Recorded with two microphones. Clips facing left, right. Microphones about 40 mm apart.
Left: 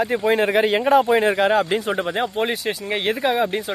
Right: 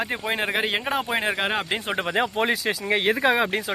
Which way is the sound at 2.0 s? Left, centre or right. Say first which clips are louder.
Left 1 dB; right.